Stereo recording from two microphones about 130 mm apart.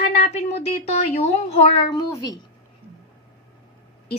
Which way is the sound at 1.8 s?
30° left (ahead or behind).